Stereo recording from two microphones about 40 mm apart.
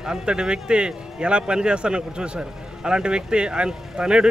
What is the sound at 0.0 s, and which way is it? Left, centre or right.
Speech, centre.